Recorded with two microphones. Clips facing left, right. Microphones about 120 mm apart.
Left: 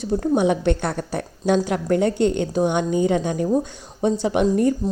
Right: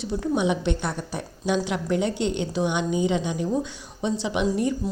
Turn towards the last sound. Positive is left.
turn(degrees=50)  # may be behind; listen again after turning